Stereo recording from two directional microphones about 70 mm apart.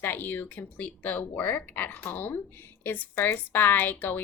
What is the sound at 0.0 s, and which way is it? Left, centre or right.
A woman's voice, left.